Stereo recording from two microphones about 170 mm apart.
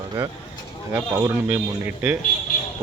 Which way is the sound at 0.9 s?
10° right (ahead or behind).